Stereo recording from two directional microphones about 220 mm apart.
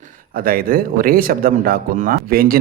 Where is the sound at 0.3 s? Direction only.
40° right (ahead or behind).